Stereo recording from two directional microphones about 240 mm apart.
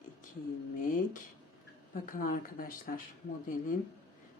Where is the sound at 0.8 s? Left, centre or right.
Left.